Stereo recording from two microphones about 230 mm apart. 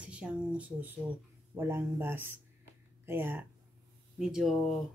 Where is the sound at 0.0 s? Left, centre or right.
Centre.